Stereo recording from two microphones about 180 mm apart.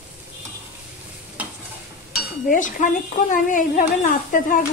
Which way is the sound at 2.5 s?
45° left (ahead or behind).